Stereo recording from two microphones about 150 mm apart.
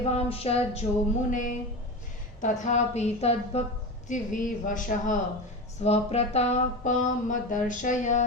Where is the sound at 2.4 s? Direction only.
55° left (ahead or behind).